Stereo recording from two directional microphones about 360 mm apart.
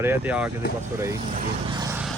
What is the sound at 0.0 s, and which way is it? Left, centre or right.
Speech, centre.